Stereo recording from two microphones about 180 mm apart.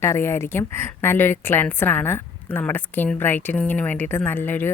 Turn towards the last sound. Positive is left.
turn(degrees=10)  # may be behind; listen again after turning